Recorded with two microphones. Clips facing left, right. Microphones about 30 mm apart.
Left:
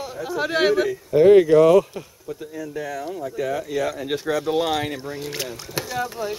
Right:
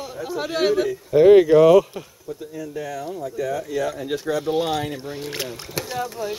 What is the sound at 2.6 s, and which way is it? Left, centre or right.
Speech, left.